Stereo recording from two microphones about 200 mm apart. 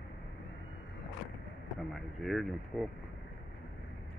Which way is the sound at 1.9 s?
Centre (ahead or behind).